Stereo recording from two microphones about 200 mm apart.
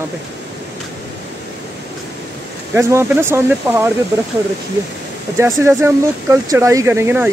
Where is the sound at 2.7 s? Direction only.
10° right (ahead or behind).